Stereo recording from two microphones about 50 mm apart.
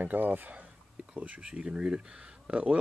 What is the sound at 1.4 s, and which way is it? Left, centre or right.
Speech, centre.